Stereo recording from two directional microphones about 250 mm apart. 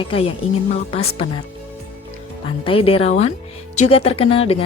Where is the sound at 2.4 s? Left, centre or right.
Left.